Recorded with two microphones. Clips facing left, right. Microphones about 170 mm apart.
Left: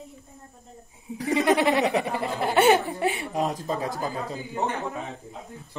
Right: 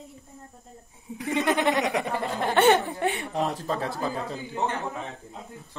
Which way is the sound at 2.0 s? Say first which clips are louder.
Left 1 dB; 10° left (ahead or behind).